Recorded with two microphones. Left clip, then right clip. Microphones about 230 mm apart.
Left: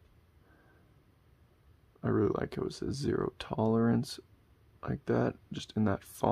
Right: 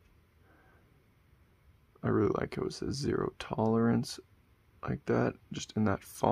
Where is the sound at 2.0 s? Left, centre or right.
Centre.